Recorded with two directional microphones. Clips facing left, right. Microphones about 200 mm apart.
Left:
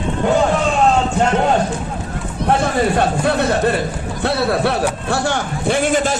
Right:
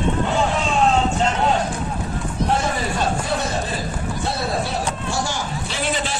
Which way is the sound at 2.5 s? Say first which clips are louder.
Left 8 dB; 60° left (ahead or behind).